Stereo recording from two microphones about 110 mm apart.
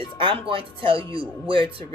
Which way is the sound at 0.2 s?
50° right (ahead or behind).